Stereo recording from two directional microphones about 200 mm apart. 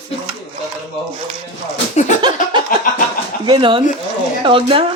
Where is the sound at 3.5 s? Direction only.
25° right (ahead or behind).